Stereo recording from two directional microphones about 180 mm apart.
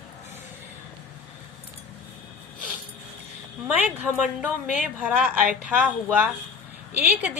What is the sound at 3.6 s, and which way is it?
A woman's voice, 10° right (ahead or behind).